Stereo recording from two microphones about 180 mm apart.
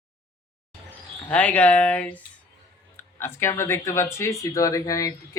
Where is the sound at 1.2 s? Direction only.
5° left (ahead or behind).